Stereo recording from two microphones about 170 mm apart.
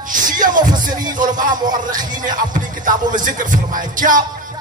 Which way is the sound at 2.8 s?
50° right (ahead or behind).